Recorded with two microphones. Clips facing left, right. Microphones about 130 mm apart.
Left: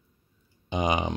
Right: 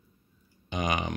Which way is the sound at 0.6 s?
25° left (ahead or behind).